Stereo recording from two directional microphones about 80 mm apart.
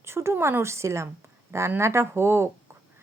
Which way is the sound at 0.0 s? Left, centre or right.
Right.